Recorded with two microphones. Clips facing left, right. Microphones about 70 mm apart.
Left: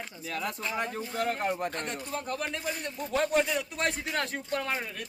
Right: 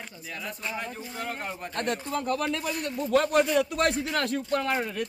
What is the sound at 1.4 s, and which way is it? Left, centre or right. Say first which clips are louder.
Speech: left 5 dB; left.